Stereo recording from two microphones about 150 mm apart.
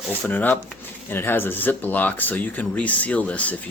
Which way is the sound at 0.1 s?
10° left (ahead or behind).